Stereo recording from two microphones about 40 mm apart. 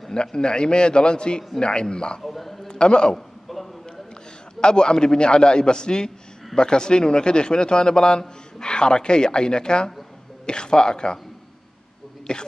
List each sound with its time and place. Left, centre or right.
0.1 s a man's voice: left
2.2 s a man's voice: centre
2.7 s a man's voice: left
3.2 s chuckle: centre
4.6 s a man's voice: left
12.3 s a man's voice: left